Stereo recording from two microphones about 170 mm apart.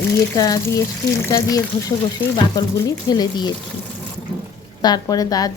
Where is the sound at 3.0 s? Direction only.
25° left (ahead or behind).